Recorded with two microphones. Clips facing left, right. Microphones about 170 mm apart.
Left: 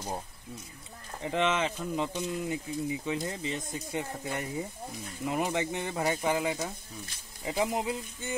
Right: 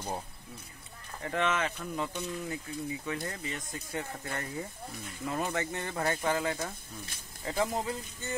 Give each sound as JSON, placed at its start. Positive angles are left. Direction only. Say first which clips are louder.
{"t": 1.2, "sound": "speech", "louder": "left 2 dB", "side_deg": 20}